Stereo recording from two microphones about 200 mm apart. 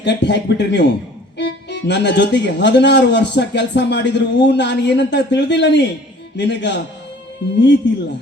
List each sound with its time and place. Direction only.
0.0 s speech: 60° left (ahead or behind)